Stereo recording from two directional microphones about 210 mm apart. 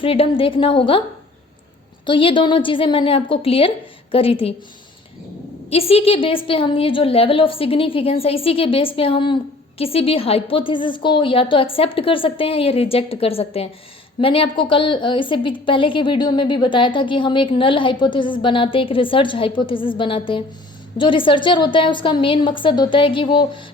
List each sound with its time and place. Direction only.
0.0 s a woman's voice: 25° left (ahead or behind)
2.0 s a woman's voice: 25° left (ahead or behind)
5.7 s a woman's voice: 30° left (ahead or behind)